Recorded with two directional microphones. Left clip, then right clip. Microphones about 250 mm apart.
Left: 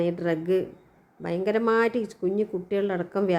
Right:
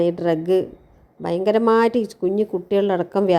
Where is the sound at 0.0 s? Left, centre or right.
Centre.